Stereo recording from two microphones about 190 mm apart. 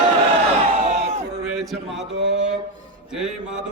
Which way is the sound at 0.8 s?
35° right (ahead or behind).